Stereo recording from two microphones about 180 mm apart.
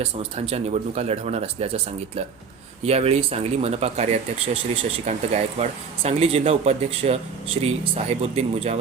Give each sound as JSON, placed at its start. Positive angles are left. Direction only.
{"t": 0.0, "sound": "speech", "side_deg": -35}